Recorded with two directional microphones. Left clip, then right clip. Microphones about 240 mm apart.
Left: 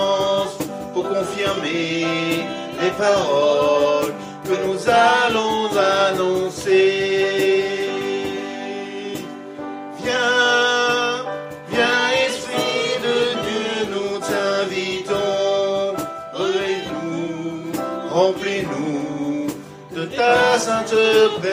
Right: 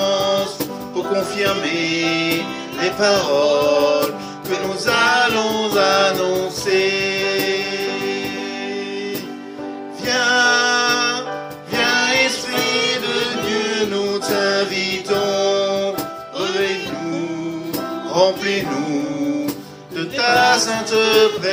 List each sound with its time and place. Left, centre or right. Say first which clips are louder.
0.0 s music: right 1 dB; right
10.1 s music: right 1 dB; right
18.1 s music: right 2 dB; right
20.0 s music: right 1 dB; right